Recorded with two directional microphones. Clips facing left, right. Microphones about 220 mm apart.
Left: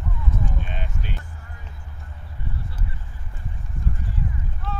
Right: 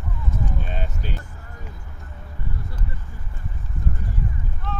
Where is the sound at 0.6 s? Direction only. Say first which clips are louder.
Right 2 dB; 40° right (ahead or behind).